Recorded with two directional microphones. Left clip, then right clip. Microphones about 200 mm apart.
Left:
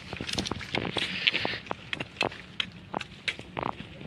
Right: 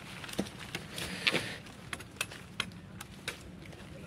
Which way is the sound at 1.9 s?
65° right (ahead or behind).